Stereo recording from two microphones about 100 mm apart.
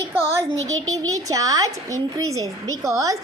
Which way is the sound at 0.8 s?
35° right (ahead or behind).